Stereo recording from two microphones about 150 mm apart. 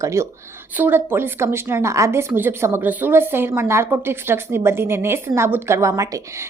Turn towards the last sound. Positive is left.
turn(degrees=-20)  # may be behind; listen again after turning